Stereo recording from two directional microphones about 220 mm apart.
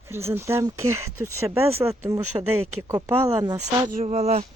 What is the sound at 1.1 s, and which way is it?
Speech, 80° right.